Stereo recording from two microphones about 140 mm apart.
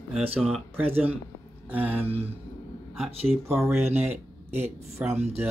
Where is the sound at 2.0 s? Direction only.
45° right (ahead or behind).